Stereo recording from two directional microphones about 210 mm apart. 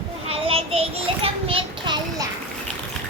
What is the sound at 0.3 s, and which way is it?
Child singing, 25° right (ahead or behind).